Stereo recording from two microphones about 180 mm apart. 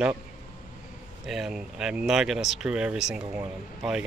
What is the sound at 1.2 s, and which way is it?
Speech, centre (ahead or behind).